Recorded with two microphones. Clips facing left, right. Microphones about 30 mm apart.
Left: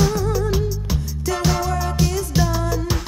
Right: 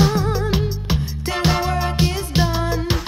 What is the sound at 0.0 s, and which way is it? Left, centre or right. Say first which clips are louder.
Music: right 1 dB; right.